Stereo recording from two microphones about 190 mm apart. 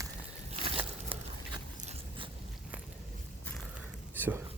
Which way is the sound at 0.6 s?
30° right (ahead or behind).